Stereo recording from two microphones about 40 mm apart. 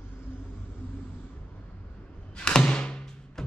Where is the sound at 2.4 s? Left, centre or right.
Left.